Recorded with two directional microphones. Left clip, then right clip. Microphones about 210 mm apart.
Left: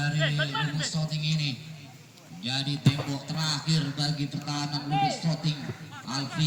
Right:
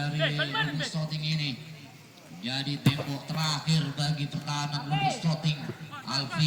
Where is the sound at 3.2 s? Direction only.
10° right (ahead or behind); by 6.2 s 30° right (ahead or behind).